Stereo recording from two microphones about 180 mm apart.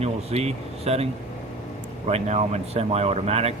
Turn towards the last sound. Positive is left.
turn(degrees=-35)  # may be behind; listen again after turning